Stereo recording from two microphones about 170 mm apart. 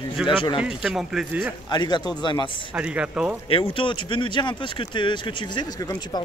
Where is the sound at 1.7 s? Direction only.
25° left (ahead or behind).